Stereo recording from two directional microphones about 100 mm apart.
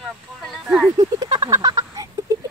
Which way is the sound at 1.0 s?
40° right (ahead or behind).